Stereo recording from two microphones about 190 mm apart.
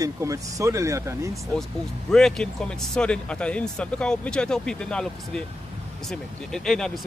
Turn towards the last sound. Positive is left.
turn(degrees=5)  # may be behind; listen again after turning